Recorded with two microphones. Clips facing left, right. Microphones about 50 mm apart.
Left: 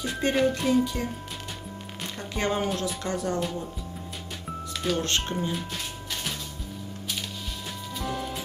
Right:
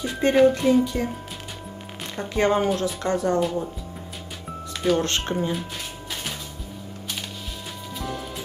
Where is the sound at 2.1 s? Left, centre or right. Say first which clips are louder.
Right 7 dB; centre.